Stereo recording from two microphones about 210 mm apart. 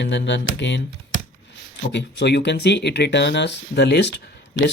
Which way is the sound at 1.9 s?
55° left (ahead or behind).